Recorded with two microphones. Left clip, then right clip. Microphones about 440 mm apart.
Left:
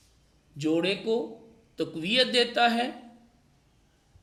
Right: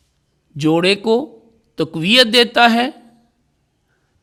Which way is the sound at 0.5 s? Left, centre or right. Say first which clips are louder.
Right 12 dB; right.